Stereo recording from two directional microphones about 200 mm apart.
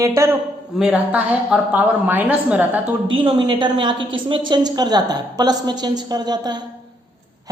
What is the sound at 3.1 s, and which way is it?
A woman's voice, 25° right (ahead or behind).